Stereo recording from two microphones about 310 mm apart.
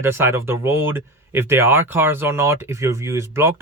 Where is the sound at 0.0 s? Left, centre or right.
Centre.